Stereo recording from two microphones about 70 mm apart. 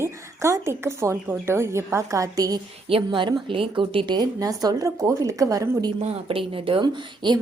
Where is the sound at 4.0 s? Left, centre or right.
Right.